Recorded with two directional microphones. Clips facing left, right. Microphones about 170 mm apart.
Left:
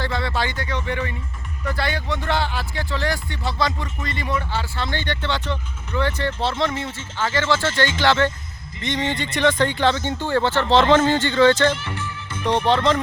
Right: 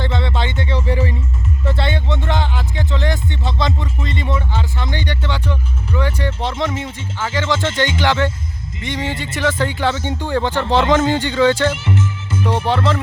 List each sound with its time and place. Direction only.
0.0 s music: 20° right (ahead or behind)
1.6 s speech: 25° right (ahead or behind); by 11.8 s 10° right (ahead or behind)
11.9 s music: 5° right (ahead or behind)